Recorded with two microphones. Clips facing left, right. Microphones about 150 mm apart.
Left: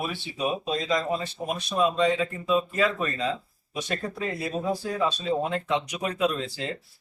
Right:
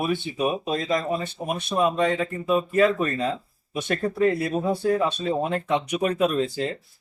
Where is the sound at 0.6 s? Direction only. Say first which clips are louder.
Right 2 dB; 55° right (ahead or behind).